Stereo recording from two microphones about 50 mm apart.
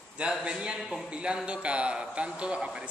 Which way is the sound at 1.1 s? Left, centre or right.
Centre.